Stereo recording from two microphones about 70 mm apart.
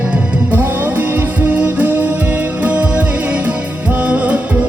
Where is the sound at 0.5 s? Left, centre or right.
Right.